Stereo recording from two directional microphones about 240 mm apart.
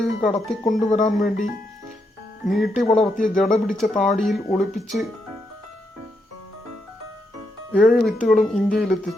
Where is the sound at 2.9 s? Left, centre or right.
Left.